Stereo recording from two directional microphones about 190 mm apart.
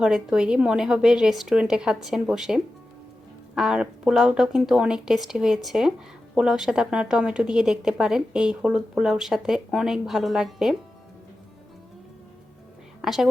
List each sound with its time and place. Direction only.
0.0 s speech: 5° right (ahead or behind)
13.0 s a woman's voice: centre (ahead or behind)